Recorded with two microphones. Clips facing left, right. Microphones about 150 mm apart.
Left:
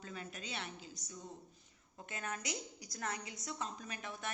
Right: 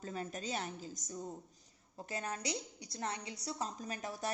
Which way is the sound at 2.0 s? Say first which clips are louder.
Right 3 dB; 35° right (ahead or behind).